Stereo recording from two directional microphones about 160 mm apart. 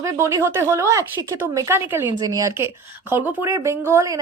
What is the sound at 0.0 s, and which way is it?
A woman's voice, 20° right (ahead or behind).